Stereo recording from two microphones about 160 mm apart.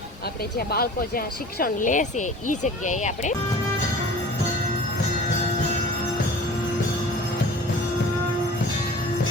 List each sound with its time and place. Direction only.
0.7 s speech: 70° left (ahead or behind); by 3.3 s 50° left (ahead or behind)